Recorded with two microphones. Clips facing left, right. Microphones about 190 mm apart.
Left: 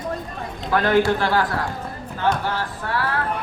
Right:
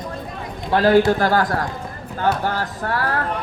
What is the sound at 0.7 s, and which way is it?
A man's voice, 35° right (ahead or behind).